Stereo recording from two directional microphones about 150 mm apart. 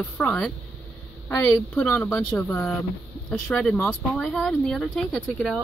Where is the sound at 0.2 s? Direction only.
5° left (ahead or behind).